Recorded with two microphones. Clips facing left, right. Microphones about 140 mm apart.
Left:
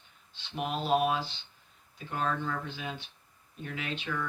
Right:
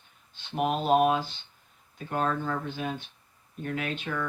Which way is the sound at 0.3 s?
50° right (ahead or behind).